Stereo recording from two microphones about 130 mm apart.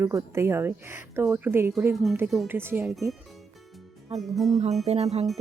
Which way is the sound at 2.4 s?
15° right (ahead or behind).